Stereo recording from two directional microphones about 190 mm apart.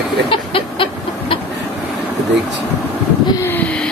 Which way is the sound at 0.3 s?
30° left (ahead or behind).